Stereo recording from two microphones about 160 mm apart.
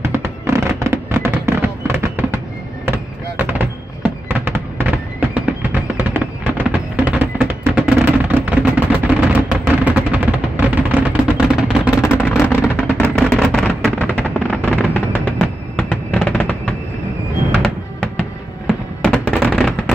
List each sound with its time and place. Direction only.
0.0 s fireworks: 15° right (ahead or behind)
9.8 s a sound: 10° right (ahead or behind)
11.9 s vehicle: 15° left (ahead or behind)
15.9 s music: 10° left (ahead or behind)
18.7 s fireworks: 5° left (ahead or behind)